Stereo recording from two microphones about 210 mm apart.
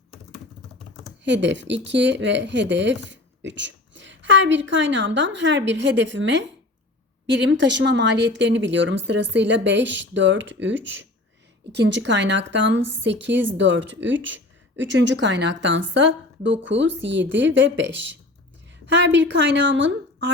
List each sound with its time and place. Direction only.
1.2 s speech: 60° right (ahead or behind)